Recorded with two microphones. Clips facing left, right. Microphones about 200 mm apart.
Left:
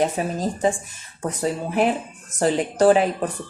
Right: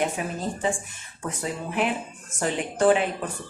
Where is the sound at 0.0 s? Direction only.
35° left (ahead or behind).